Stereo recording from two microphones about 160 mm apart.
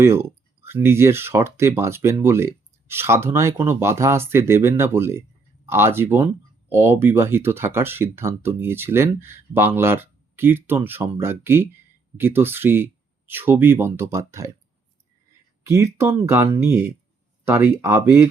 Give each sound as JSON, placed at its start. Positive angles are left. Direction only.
{"t": 0.0, "sound": "speech", "side_deg": -15}
{"t": 15.6, "sound": "speech", "side_deg": -20}